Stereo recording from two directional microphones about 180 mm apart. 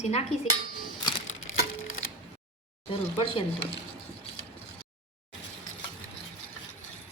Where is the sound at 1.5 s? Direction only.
90° left.